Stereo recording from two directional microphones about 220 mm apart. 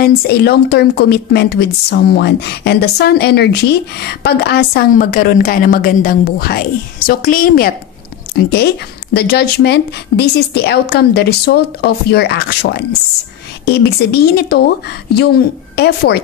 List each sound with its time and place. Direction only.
0.0 s a woman's voice: 45° left (ahead or behind)
15.7 s a woman's voice: 50° left (ahead or behind)